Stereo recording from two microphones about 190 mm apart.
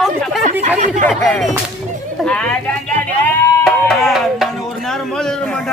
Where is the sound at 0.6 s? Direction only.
40° right (ahead or behind).